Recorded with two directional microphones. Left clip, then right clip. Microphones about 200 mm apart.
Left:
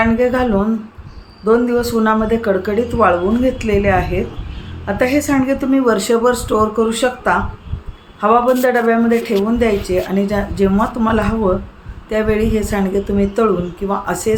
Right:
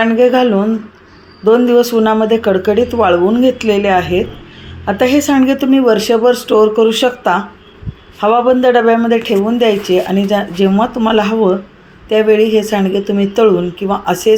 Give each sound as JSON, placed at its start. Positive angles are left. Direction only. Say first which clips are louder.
{"t": 0.2, "sound": "speech", "louder": "right 5 dB", "side_deg": -20}